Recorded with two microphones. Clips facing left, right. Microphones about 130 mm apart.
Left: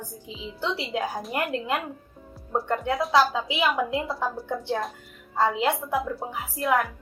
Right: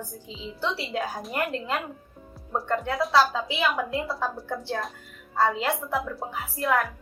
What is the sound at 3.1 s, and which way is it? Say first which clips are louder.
A woman's voice: even; 20° left (ahead or behind).